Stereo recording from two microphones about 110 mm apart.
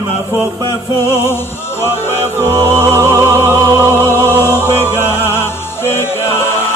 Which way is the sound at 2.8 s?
25° right (ahead or behind).